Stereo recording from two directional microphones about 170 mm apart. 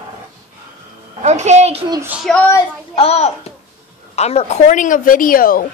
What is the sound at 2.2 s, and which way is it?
Speech, 5° left (ahead or behind).